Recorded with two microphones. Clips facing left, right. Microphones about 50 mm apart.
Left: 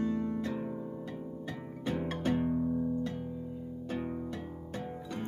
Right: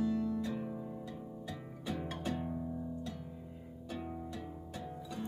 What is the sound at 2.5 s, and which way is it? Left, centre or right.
Music, left.